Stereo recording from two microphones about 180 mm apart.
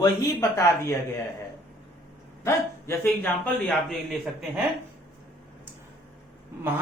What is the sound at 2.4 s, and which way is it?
Speech, 15° left (ahead or behind).